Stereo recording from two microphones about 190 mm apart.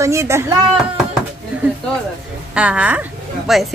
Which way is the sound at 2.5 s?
5° right (ahead or behind).